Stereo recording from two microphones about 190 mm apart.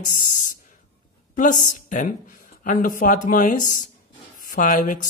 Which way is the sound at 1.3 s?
40° left (ahead or behind).